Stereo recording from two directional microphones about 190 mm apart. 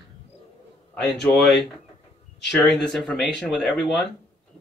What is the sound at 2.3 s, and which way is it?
Speech, 60° left (ahead or behind).